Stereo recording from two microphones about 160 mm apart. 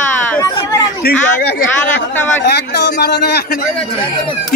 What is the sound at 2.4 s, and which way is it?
A man's voice, 90° left.